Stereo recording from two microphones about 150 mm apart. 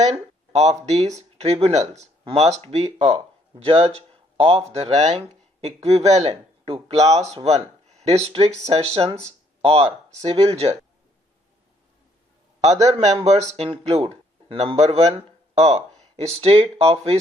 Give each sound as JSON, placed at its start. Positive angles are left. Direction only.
{"t": 0.0, "sound": "speech", "side_deg": -45}
{"t": 12.6, "sound": "speech", "side_deg": -50}
{"t": 15.5, "sound": "a sound", "side_deg": -45}
{"t": 16.4, "sound": "speech", "side_deg": -45}